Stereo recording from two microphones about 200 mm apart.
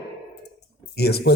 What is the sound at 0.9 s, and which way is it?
Speech, 55° left (ahead or behind).